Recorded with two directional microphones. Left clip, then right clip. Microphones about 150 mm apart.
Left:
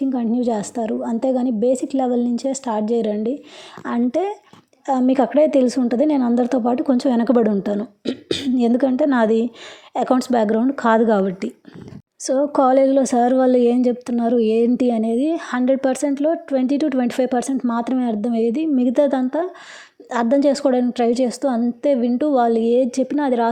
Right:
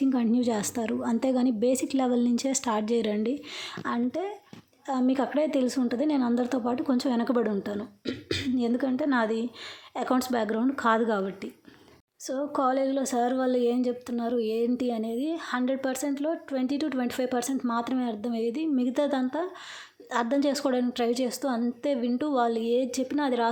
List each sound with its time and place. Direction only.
0.0 s a woman's voice: 15° left (ahead or behind)
4.1 s speech: 60° left (ahead or behind)
4.9 s a woman's voice: 40° left (ahead or behind)